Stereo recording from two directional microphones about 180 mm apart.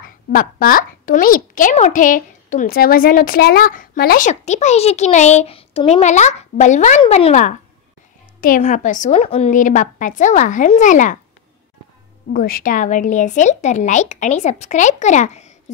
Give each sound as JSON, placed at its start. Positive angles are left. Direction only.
{"t": 0.3, "sound": "a woman's voice", "side_deg": 50}
{"t": 4.3, "sound": "a woman's voice", "side_deg": 40}
{"t": 9.5, "sound": "a woman's voice", "side_deg": 45}
{"t": 12.3, "sound": "a woman's voice", "side_deg": 55}